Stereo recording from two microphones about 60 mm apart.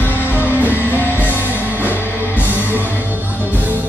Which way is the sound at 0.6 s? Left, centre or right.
Right.